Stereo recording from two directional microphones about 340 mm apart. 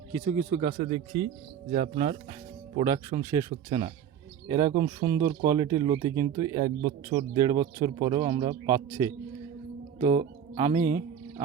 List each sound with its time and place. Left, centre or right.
0.1 s speech: centre